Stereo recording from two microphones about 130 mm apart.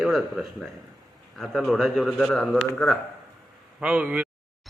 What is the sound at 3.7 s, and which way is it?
Speech, 10° right (ahead or behind).